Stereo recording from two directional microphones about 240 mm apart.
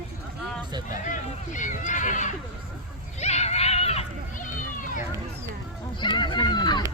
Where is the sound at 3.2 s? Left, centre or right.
Left.